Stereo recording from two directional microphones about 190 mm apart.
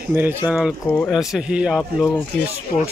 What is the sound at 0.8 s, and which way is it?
Speech, 5° left (ahead or behind).